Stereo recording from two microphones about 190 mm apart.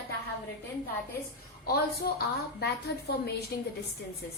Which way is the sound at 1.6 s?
55° left (ahead or behind).